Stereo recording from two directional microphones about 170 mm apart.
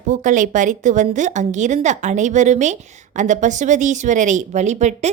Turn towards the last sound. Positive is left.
turn(degrees=-45)  # may be behind; listen again after turning